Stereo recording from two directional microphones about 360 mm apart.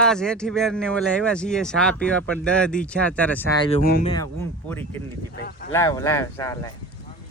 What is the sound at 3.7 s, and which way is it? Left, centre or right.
Speech, left.